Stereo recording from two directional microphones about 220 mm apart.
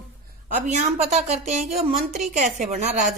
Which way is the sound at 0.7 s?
30° right (ahead or behind).